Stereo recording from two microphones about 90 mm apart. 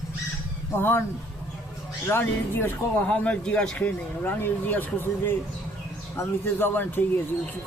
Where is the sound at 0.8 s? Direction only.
25° left (ahead or behind).